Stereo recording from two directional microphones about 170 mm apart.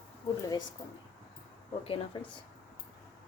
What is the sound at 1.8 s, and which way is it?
Speech, 30° left (ahead or behind).